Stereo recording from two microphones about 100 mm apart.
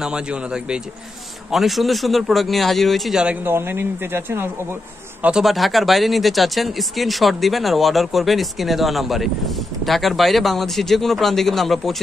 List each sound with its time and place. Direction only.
0.0 s a man's voice: 10° right (ahead or behind)
3.4 s speech: 20° right (ahead or behind)
5.2 s speech: 5° right (ahead or behind)